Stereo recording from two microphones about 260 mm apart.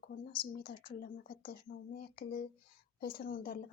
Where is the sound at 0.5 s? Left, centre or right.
Left.